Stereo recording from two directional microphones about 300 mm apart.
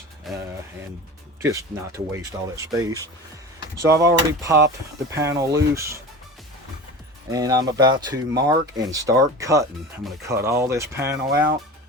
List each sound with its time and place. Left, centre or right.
0.3 s speech: centre
7.3 s speech: centre